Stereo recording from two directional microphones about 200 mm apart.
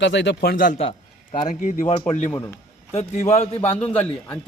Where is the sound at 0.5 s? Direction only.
40° left (ahead or behind).